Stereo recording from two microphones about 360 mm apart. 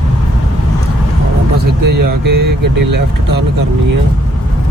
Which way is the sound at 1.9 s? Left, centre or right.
Right.